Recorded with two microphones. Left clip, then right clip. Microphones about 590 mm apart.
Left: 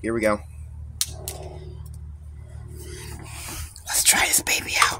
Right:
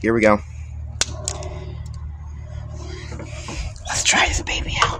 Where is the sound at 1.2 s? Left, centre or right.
Left.